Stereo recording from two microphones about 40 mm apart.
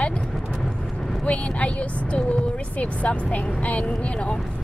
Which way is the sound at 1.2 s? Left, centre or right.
Left.